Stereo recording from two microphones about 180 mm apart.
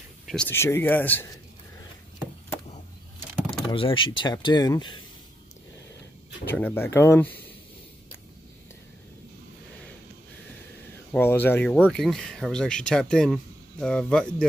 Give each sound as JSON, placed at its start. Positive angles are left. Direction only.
{"t": 0.3, "sound": "speech", "side_deg": 10}
{"t": 3.7, "sound": "speech", "side_deg": 30}
{"t": 6.4, "sound": "speech", "side_deg": 10}
{"t": 11.1, "sound": "speech", "side_deg": 10}